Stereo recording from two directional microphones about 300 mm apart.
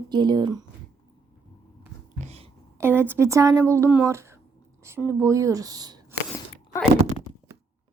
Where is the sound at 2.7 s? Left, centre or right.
Centre.